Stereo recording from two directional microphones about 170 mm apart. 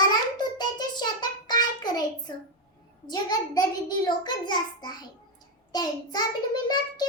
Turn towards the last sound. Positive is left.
turn(degrees=25)  # may be behind; listen again after turning